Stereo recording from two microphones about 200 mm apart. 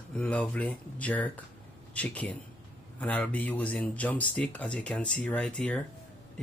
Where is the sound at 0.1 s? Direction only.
5° left (ahead or behind).